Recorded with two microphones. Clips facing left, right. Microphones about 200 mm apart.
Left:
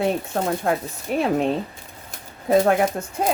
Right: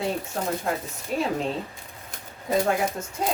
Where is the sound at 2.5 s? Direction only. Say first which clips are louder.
Left 6 dB; 60° left (ahead or behind).